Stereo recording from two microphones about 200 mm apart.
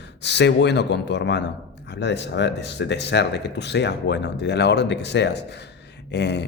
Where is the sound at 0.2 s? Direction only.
60° left (ahead or behind).